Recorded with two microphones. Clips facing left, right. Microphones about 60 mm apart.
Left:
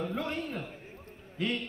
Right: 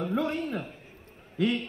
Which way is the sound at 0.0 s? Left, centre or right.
Right.